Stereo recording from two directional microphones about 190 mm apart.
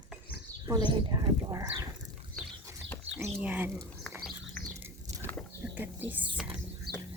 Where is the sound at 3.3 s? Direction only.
10° right (ahead or behind).